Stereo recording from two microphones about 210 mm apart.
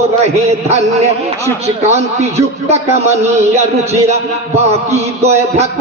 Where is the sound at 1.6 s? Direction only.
30° right (ahead or behind).